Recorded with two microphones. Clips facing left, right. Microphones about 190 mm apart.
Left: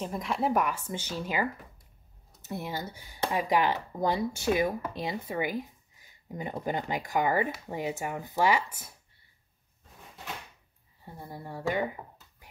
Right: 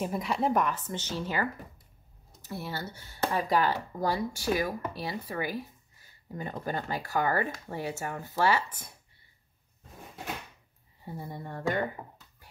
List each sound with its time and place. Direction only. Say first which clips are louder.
0.0 s speech: right 1 dB; 5° right (ahead or behind)
11.1 s speech: right 2 dB; centre (ahead or behind)